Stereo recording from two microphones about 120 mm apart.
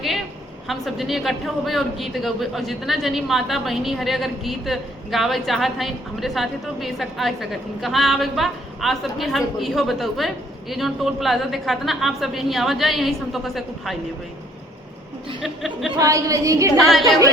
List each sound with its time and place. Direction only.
0.7 s a man's voice: centre (ahead or behind)
15.4 s a man's voice: centre (ahead or behind)
16.0 s a woman's voice: 25° right (ahead or behind)
16.7 s a man's voice: centre (ahead or behind)